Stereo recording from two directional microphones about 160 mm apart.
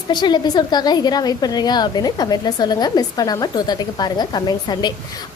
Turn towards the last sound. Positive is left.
turn(degrees=25)  # may be behind; listen again after turning